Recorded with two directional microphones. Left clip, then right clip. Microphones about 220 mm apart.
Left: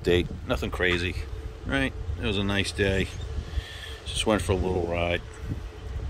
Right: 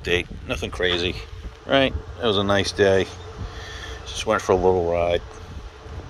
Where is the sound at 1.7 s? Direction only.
5° left (ahead or behind).